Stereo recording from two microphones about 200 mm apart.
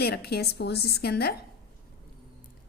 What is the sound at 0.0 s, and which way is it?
A woman's voice, 50° left (ahead or behind).